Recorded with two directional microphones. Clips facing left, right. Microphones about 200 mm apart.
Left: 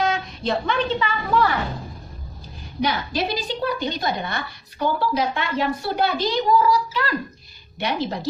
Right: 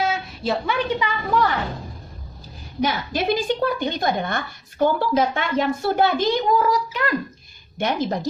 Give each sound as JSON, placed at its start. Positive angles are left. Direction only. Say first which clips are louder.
{"t": 0.0, "sound": "a woman's voice", "louder": "left 1 dB", "side_deg": -5}
{"t": 2.8, "sound": "a woman's voice", "louder": "right 1 dB", "side_deg": -50}